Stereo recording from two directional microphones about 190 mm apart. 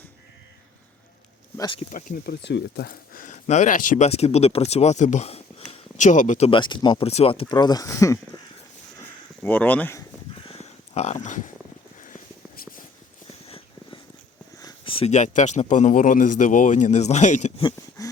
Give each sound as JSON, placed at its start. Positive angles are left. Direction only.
{"t": 1.5, "sound": "speech", "side_deg": 25}
{"t": 1.9, "sound": "speech", "side_deg": 45}
{"t": 2.5, "sound": "speech", "side_deg": 65}
{"t": 9.4, "sound": "speech", "side_deg": 10}
{"t": 10.5, "sound": "a sound", "side_deg": 35}
{"t": 14.6, "sound": "speech", "side_deg": 30}
{"t": 17.6, "sound": "a sound", "side_deg": 20}